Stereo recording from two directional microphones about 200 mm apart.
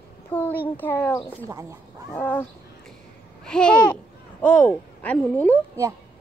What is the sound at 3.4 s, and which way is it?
Speech, 5° left (ahead or behind).